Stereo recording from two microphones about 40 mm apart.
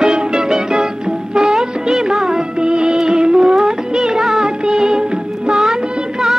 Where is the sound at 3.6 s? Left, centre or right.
Centre.